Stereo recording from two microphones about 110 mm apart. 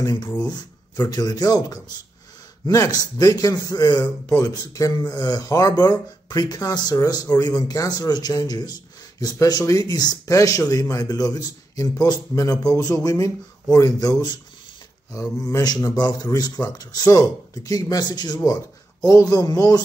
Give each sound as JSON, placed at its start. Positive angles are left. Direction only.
{"t": 0.0, "sound": "speech", "side_deg": 40}
{"t": 15.3, "sound": "speech", "side_deg": 35}